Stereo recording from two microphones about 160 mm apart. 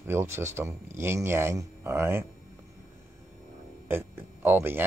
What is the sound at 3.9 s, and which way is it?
Speech, 15° right (ahead or behind).